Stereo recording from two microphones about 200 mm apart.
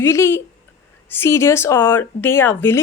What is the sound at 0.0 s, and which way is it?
A woman's voice, 15° left (ahead or behind).